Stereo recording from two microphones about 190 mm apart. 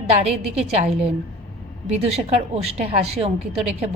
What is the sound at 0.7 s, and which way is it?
A woman's voice, 35° right (ahead or behind).